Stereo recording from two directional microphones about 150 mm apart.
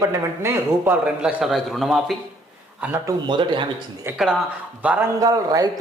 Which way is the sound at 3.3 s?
30° right (ahead or behind).